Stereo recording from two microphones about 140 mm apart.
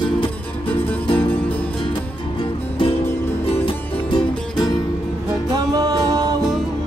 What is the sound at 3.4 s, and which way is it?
Music, 45° left (ahead or behind).